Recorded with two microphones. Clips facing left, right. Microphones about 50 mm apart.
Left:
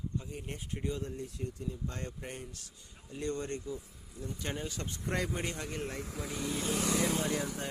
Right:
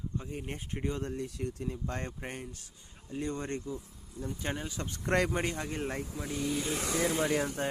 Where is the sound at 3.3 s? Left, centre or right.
Right.